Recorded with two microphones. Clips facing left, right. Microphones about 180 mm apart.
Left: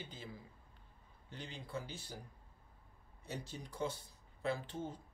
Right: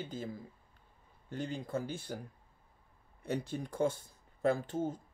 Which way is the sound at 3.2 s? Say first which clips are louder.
Right 10 dB; 55° right (ahead or behind).